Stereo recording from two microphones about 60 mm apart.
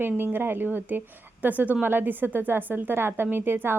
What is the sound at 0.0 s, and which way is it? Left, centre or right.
A woman's voice, right.